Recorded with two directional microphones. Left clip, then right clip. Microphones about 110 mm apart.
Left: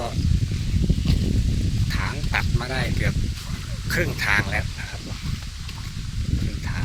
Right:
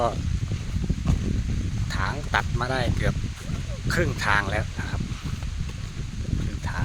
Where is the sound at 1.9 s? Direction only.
5° right (ahead or behind).